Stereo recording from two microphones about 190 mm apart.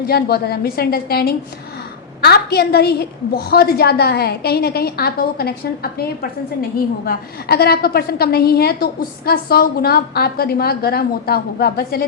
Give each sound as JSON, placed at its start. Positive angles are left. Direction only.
{"t": 0.1, "sound": "a woman's voice", "side_deg": 55}